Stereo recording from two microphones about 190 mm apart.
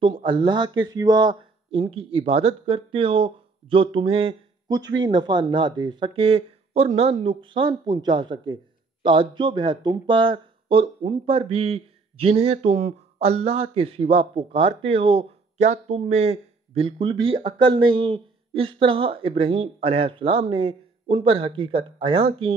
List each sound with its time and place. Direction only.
0.0 s speech: 25° right (ahead or behind)
4.6 s speech: 20° right (ahead or behind)